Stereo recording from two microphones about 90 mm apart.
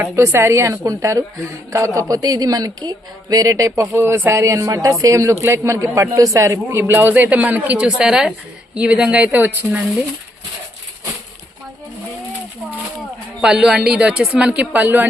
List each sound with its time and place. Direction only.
0.2 s a woman's voice: 25° right (ahead or behind)
13.4 s a woman's voice: 5° right (ahead or behind)